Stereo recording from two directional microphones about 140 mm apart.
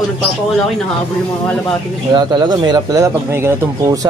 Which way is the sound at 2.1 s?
30° right (ahead or behind).